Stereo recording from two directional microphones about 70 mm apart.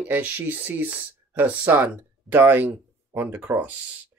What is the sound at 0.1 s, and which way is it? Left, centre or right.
Speech, right.